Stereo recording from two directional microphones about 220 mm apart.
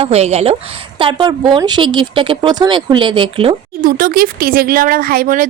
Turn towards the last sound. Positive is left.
turn(degrees=-40)  # may be behind; listen again after turning